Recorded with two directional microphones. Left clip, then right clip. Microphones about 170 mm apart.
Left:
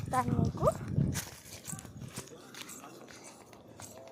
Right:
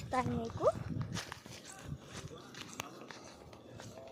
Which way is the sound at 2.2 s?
75° left (ahead or behind).